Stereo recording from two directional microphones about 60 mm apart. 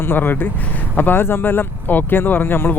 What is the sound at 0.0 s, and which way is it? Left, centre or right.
Speech, left.